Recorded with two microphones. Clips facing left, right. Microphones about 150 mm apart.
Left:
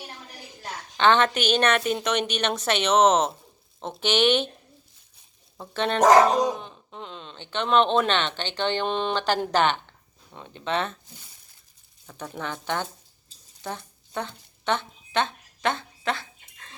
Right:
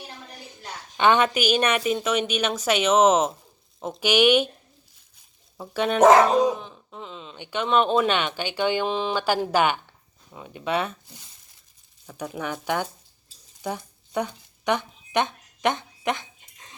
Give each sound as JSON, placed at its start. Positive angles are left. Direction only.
{"t": 0.9, "sound": "a woman's voice", "side_deg": -10}
{"t": 5.5, "sound": "dog", "side_deg": -10}
{"t": 7.3, "sound": "speech", "side_deg": -10}
{"t": 12.0, "sound": "speech", "side_deg": -10}
{"t": 13.6, "sound": "a sound", "side_deg": -10}